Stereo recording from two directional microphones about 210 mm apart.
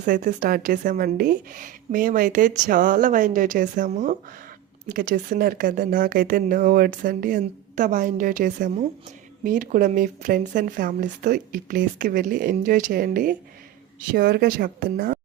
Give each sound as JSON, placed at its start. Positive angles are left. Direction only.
{"t": 0.0, "sound": "speech", "side_deg": -40}